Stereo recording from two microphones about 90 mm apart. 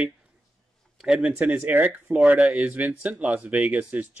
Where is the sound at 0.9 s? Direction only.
10° right (ahead or behind).